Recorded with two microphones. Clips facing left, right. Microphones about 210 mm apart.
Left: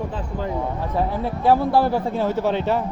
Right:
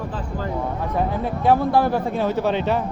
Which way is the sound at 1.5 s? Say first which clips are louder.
Even; 10° left (ahead or behind).